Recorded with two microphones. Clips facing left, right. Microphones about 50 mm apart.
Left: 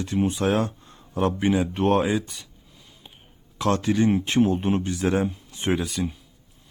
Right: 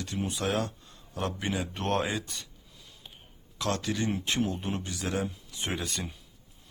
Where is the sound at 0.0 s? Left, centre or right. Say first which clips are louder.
Left 9 dB; left; by 2.5 s centre.